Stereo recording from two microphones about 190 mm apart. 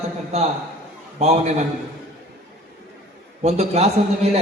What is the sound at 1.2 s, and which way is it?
Speech, 35° right (ahead or behind).